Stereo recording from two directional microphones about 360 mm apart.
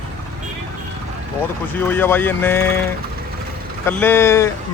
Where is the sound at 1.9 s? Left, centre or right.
Centre.